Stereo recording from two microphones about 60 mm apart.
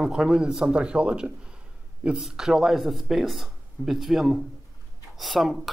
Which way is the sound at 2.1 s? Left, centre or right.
Centre.